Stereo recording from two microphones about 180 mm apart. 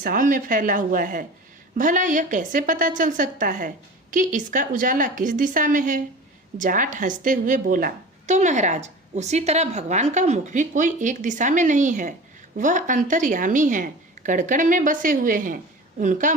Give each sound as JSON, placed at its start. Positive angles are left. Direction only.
{"t": 0.0, "sound": "a woman's voice", "side_deg": -50}